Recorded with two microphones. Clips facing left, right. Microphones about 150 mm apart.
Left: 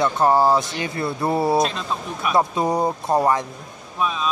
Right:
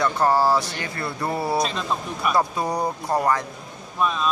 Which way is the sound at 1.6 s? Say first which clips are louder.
Left 2 dB; centre (ahead or behind).